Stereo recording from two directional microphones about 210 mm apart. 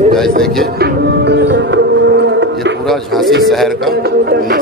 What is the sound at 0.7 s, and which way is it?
Music, 50° right (ahead or behind).